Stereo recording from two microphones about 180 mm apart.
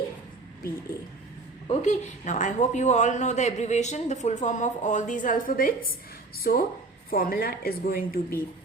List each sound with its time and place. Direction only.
1.6 s a woman's voice: 40° left (ahead or behind); by 8.4 s 55° left (ahead or behind)